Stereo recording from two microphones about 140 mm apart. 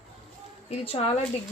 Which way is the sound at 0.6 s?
45° left (ahead or behind).